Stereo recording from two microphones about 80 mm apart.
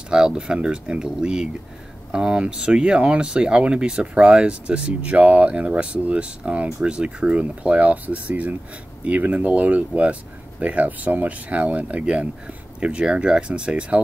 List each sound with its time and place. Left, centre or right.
0.1 s speech: centre